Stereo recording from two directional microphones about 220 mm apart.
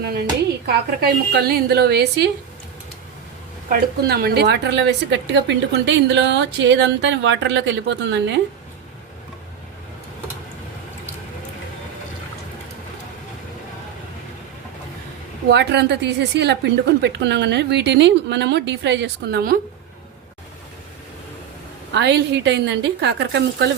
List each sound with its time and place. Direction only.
0.0 s a woman's voice: 45° right (ahead or behind)
3.7 s a woman's voice: 45° right (ahead or behind)
15.4 s a woman's voice: 50° right (ahead or behind)
21.9 s a woman's voice: 50° right (ahead or behind)